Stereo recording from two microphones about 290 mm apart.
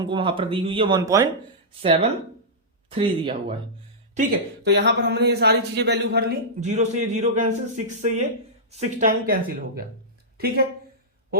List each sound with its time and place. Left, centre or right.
0.0 s speech: centre
4.1 s a man's voice: right